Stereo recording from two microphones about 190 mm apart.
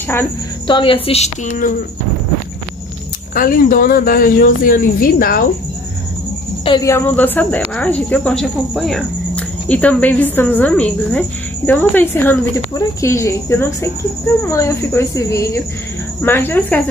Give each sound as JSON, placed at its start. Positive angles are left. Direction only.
{"t": 0.7, "sound": "a woman's voice", "side_deg": 25}
{"t": 3.3, "sound": "speech", "side_deg": 50}
{"t": 6.6, "sound": "speech", "side_deg": 25}
{"t": 6.9, "sound": "speech", "side_deg": 10}